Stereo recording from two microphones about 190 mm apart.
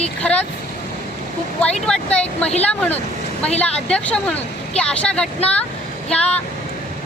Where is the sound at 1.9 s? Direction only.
5° left (ahead or behind).